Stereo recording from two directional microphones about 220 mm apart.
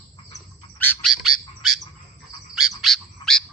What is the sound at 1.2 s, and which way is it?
Bird, 75° left (ahead or behind).